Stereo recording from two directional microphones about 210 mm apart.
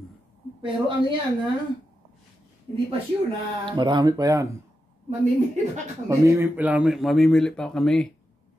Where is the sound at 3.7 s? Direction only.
20° right (ahead or behind).